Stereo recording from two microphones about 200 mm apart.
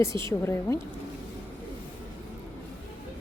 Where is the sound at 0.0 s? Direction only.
15° left (ahead or behind).